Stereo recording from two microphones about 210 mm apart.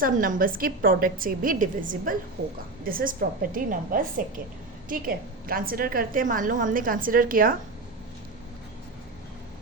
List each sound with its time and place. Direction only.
0.0 s a woman's voice: 40° right (ahead or behind)
2.4 s a woman's voice: 50° right (ahead or behind)